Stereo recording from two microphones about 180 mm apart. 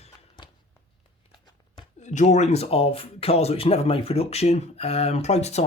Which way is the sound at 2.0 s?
40° left (ahead or behind).